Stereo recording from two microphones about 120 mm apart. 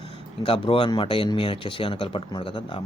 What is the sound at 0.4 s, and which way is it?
Speech, 50° left (ahead or behind).